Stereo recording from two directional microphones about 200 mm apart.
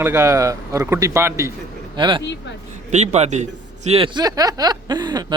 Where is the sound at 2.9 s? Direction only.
35° right (ahead or behind).